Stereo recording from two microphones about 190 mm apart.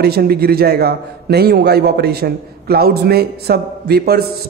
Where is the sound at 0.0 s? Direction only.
55° right (ahead or behind).